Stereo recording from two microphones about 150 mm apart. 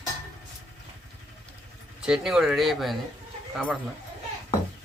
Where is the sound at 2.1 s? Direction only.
5° right (ahead or behind).